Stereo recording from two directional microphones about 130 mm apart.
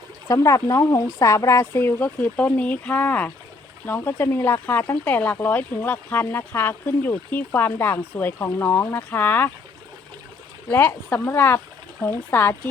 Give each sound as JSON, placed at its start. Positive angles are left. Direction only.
{"t": 0.3, "sound": "speech", "side_deg": 25}
{"t": 10.7, "sound": "speech", "side_deg": 10}